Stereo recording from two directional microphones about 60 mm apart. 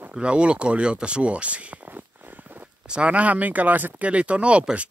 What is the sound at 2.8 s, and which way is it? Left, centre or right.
Speech, centre.